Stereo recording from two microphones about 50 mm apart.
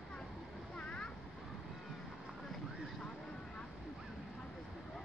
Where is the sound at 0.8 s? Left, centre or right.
Centre.